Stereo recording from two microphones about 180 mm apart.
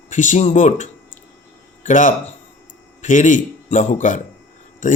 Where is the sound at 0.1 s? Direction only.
45° left (ahead or behind).